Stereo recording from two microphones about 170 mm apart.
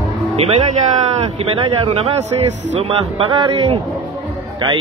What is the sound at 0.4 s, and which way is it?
Speech, 35° right (ahead or behind).